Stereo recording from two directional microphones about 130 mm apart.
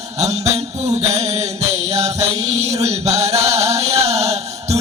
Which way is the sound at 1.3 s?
55° right (ahead or behind).